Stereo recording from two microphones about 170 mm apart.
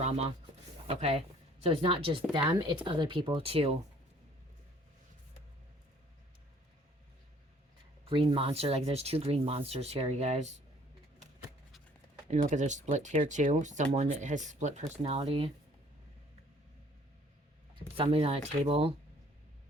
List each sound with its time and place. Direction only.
0.9 s speech: 35° right (ahead or behind)
8.0 s speech: 30° right (ahead or behind)
12.3 s speech: 45° right (ahead or behind)
17.9 s speech: 30° right (ahead or behind)